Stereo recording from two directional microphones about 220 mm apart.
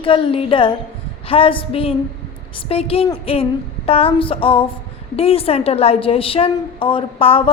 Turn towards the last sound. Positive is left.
turn(degrees=25)  # may be behind; listen again after turning